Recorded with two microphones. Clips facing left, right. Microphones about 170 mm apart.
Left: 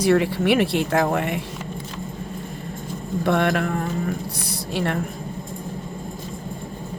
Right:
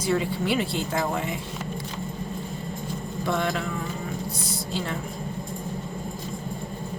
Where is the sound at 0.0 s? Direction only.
70° left (ahead or behind).